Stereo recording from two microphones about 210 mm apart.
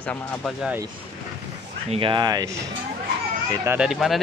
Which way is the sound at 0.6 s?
5° right (ahead or behind).